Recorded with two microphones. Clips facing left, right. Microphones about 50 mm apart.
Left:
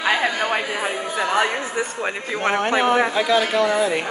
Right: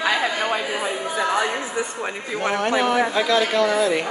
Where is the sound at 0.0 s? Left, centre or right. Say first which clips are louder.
Left 1 dB; centre.